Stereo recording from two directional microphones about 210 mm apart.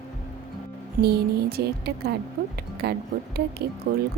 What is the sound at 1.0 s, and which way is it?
Speech, 50° right (ahead or behind).